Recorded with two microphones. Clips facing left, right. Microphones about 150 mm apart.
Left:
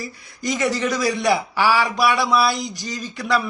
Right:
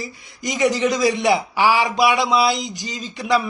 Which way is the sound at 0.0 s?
20° right (ahead or behind).